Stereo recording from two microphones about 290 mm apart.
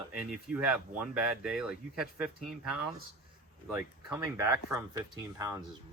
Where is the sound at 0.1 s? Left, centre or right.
Centre.